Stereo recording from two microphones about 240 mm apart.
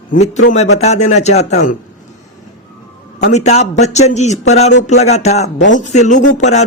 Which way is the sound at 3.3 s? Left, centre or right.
Left.